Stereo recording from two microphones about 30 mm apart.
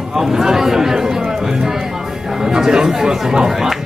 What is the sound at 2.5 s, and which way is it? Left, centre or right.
Speech, right.